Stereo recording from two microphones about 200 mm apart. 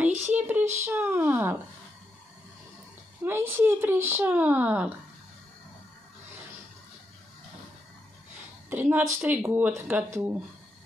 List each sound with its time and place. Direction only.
0.3 s a sound: 10° right (ahead or behind)
3.3 s speech: 10° right (ahead or behind)
8.6 s speech: 10° right (ahead or behind)